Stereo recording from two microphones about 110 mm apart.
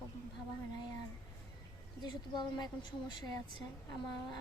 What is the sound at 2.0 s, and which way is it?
Speech, 45° left (ahead or behind).